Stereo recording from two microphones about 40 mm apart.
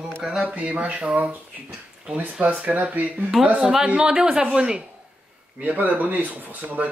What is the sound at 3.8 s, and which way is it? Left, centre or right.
A woman's voice, right.